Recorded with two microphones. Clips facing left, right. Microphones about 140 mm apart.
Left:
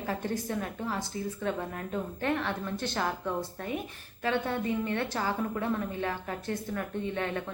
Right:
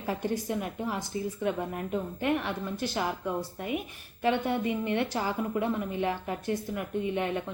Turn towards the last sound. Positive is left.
turn(degrees=-15)  # may be behind; listen again after turning